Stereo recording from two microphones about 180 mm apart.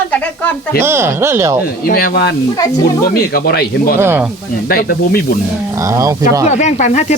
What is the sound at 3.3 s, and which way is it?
Speech, 60° left (ahead or behind).